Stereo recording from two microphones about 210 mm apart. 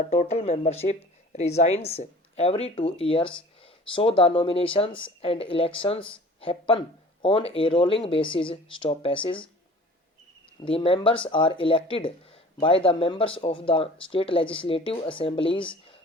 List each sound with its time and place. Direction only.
0.1 s speech: 35° left (ahead or behind)
10.7 s speech: 25° left (ahead or behind)